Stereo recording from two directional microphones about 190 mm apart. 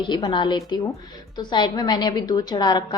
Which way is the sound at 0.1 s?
25° left (ahead or behind).